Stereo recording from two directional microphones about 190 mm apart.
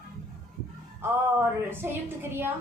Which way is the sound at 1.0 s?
10° right (ahead or behind).